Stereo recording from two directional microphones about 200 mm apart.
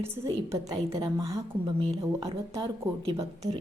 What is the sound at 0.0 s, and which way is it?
A woman's voice, 15° right (ahead or behind).